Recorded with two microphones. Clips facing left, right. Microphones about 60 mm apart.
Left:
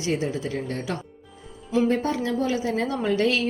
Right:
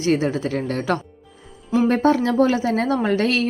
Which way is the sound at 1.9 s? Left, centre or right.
Right.